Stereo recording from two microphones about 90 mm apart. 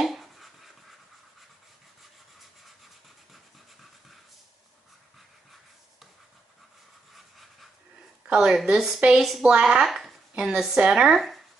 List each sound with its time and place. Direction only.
0.0 s writing: centre (ahead or behind)
8.3 s a woman's voice: 5° right (ahead or behind)